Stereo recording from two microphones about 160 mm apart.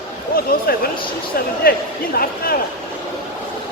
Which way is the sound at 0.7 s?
70° left (ahead or behind).